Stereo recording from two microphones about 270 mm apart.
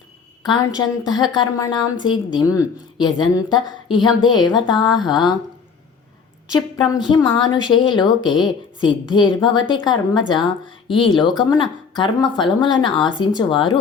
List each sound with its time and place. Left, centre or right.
0.4 s speech: centre
6.5 s speech: centre